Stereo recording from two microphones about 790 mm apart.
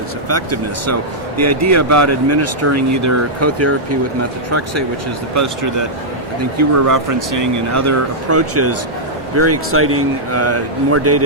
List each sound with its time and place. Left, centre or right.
0.3 s speech: centre
5.3 s speech: right